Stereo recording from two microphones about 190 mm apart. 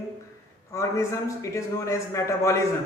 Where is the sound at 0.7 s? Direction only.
15° left (ahead or behind).